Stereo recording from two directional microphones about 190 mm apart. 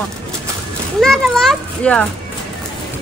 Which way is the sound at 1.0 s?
Centre (ahead or behind).